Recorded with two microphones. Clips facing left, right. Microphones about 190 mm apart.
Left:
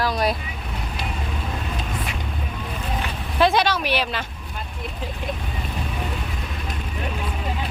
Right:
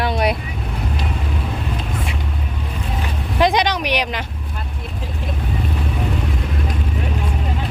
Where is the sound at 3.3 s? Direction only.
15° right (ahead or behind).